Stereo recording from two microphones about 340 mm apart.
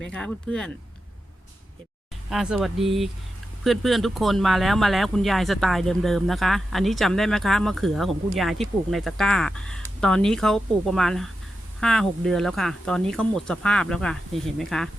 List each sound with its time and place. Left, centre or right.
0.1 s speech: centre
2.3 s speech: centre